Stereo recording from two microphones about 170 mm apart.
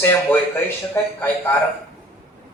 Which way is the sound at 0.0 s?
10° left (ahead or behind).